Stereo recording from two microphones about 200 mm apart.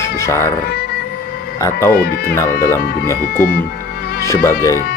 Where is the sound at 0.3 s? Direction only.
15° left (ahead or behind).